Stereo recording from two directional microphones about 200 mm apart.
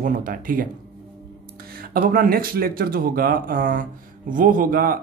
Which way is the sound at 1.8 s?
45° right (ahead or behind).